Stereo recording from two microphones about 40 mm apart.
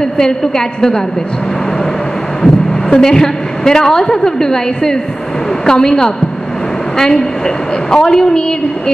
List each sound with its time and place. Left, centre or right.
0.0 s a woman's voice: centre
2.4 s a woman's voice: centre